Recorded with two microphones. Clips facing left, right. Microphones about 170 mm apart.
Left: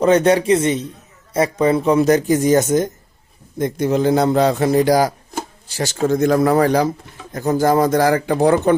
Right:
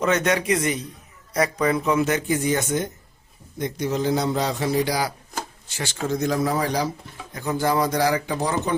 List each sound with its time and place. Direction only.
0.0 s a man's voice: 30° left (ahead or behind)
3.6 s a man's voice: 55° left (ahead or behind)
5.4 s speech: 35° left (ahead or behind); by 6.9 s 55° left (ahead or behind)
7.3 s a man's voice: 45° left (ahead or behind)